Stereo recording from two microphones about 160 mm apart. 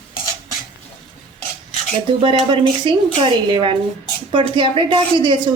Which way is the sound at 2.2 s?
30° right (ahead or behind).